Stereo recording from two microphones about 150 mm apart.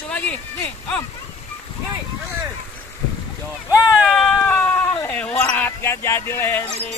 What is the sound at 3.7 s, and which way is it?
Speech, 5° right (ahead or behind).